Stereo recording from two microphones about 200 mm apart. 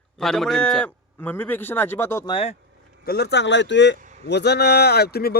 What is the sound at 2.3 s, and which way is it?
Speech, 30° left (ahead or behind).